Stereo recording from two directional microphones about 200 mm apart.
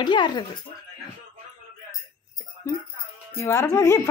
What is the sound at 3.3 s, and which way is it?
Speech, 10° left (ahead or behind).